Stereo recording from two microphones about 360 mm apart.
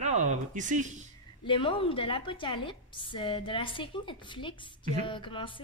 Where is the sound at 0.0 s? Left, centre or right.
Centre.